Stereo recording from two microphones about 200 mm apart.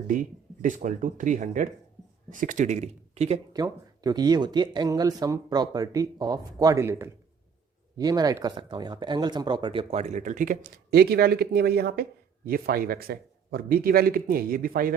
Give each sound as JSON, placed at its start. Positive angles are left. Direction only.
{"t": 0.1, "sound": "speech", "side_deg": -40}
{"t": 3.5, "sound": "speech", "side_deg": -20}